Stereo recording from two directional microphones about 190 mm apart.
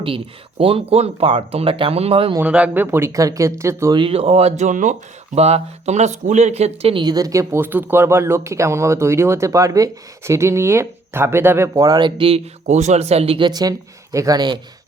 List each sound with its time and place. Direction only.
0.6 s speech: 30° right (ahead or behind)
2.3 s speech: 5° right (ahead or behind)
3.9 s speech: 30° right (ahead or behind)